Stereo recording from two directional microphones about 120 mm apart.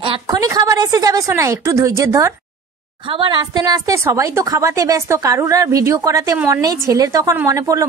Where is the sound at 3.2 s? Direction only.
40° right (ahead or behind).